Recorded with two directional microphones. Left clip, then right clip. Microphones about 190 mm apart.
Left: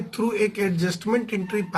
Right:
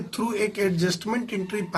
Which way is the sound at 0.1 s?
30° right (ahead or behind).